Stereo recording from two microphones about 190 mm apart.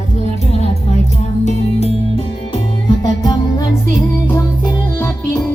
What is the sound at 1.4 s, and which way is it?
Music, 40° left (ahead or behind).